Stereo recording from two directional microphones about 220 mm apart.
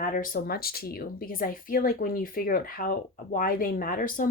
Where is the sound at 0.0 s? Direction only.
40° left (ahead or behind).